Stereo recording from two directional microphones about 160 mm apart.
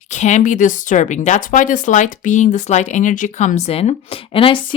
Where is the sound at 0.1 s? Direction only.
50° left (ahead or behind).